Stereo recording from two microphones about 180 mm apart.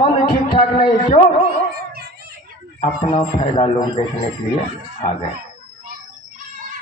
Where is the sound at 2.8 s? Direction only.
30° left (ahead or behind).